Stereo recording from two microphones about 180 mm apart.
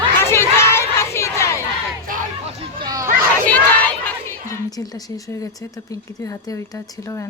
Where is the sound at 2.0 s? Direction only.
40° right (ahead or behind).